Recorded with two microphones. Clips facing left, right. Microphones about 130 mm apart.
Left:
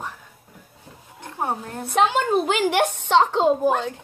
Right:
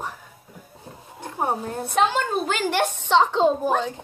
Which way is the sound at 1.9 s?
15° left (ahead or behind).